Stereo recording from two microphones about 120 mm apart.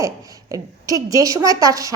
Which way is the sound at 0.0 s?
30° right (ahead or behind).